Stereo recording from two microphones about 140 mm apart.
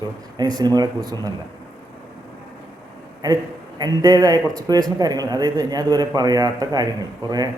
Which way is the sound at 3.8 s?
30° right (ahead or behind).